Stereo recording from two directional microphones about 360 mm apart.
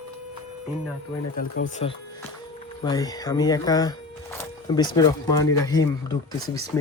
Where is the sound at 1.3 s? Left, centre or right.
Left.